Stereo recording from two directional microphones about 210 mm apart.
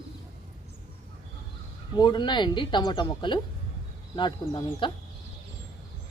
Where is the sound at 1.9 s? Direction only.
20° left (ahead or behind).